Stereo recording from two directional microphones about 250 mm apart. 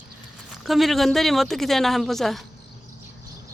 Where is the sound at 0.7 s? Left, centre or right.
Centre.